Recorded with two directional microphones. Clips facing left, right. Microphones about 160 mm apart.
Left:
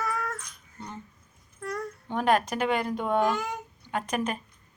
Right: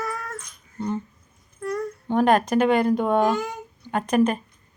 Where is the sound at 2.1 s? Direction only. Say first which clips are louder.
Right 6 dB; 45° right (ahead or behind).